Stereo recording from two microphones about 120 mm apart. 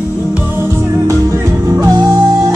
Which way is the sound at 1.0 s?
25° right (ahead or behind).